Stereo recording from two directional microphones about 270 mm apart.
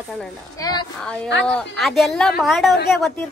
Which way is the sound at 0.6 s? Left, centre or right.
Centre.